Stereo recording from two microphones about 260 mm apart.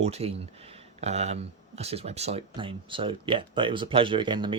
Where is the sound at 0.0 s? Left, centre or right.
Right.